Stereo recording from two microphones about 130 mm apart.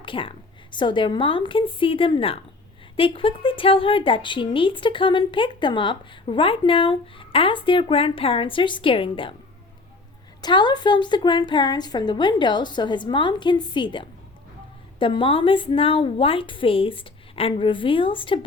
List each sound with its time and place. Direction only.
0.0 s a woman's voice: 40° left (ahead or behind)
10.4 s a woman's voice: 35° left (ahead or behind)